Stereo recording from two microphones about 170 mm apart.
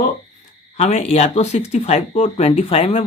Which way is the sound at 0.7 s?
40° left (ahead or behind).